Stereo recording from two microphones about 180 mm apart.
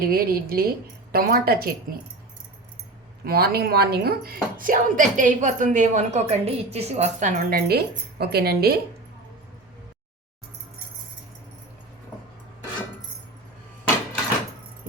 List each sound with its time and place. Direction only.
0.0 s speech: 55° right (ahead or behind)
3.2 s a woman's voice: 60° right (ahead or behind); by 7.6 s 45° right (ahead or behind)
7.7 s speech: 60° right (ahead or behind)